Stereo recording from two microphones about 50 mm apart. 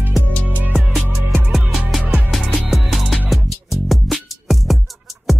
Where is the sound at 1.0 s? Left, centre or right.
Right.